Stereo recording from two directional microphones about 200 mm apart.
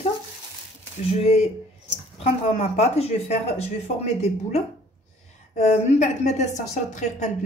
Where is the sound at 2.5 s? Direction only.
35° left (ahead or behind).